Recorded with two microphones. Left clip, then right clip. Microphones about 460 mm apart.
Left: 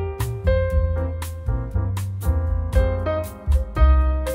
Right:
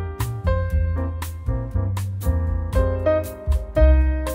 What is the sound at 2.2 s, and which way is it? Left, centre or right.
Music, centre.